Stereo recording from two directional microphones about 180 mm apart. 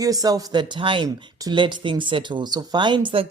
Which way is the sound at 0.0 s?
20° right (ahead or behind).